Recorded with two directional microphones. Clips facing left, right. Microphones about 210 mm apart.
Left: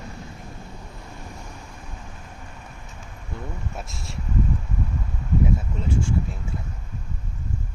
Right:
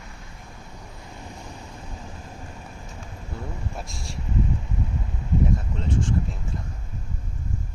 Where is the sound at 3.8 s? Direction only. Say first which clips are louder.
Even; centre (ahead or behind).